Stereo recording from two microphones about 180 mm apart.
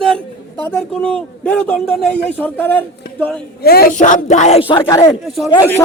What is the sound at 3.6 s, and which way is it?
Speech, 60° left (ahead or behind).